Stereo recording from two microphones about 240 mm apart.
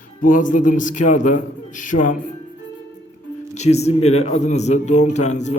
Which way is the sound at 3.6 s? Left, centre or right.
Left.